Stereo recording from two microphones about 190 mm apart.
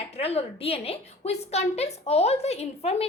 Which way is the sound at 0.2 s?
30° left (ahead or behind).